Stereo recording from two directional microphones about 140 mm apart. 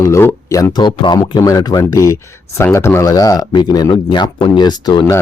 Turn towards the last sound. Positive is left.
turn(degrees=30)  # may be behind; listen again after turning